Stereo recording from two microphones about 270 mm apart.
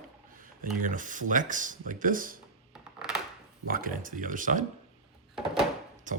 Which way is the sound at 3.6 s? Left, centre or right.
Right.